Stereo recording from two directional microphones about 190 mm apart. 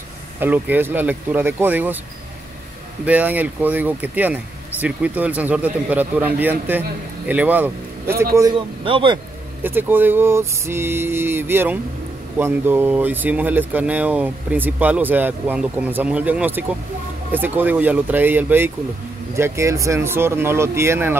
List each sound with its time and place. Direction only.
0.4 s speech: 10° right (ahead or behind)
3.1 s speech: 10° right (ahead or behind)
8.4 s speech: 25° right (ahead or behind)
9.6 s speech: 10° right (ahead or behind)